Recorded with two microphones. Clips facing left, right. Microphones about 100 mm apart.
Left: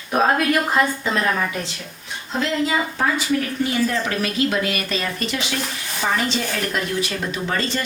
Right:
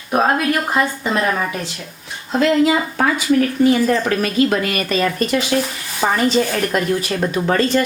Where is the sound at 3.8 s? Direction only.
45° right (ahead or behind).